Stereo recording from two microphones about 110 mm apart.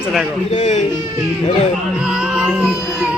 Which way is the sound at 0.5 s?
75° left (ahead or behind).